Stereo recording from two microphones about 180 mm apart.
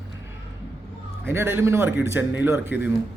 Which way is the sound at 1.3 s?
15° right (ahead or behind).